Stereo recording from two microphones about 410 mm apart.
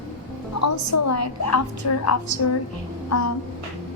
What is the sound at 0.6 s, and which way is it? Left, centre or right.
A woman's voice, left.